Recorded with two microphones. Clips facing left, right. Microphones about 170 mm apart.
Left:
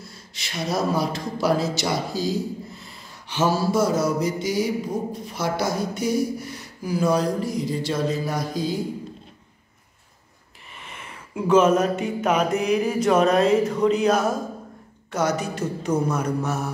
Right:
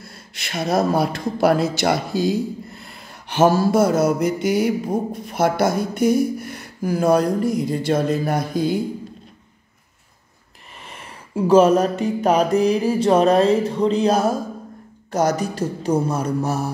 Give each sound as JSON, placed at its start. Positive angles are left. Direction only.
{"t": 0.0, "sound": "speech", "side_deg": -60}
{"t": 10.8, "sound": "music", "side_deg": -35}